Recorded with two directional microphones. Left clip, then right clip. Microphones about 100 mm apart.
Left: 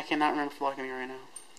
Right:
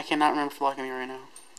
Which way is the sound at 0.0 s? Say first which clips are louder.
Right 4 dB; 30° right (ahead or behind).